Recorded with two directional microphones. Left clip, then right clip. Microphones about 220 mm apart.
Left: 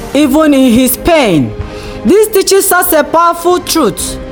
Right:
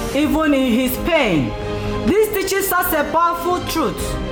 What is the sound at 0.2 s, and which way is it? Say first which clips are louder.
A woman's voice: left 10 dB; 50° left (ahead or behind).